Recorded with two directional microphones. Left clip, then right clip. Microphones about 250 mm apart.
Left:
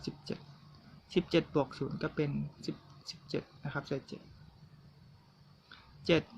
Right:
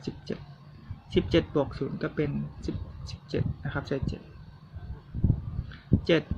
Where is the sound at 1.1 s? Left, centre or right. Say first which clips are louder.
Right 5 dB; centre.